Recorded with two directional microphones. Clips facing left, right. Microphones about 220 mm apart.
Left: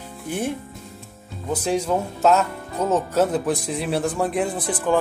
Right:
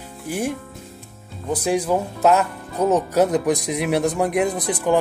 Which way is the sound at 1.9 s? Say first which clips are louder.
Even; 15° right (ahead or behind).